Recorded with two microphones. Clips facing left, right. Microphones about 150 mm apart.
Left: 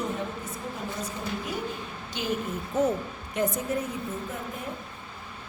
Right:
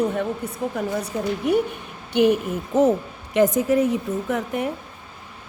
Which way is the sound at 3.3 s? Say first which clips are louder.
Right 10 dB; 90° right.